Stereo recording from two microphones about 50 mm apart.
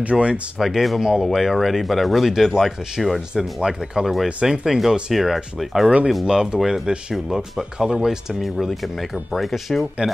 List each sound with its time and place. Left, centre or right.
0.0 s speech: right
0.6 s speech: centre
6.9 s speech: centre
7.2 s speech: centre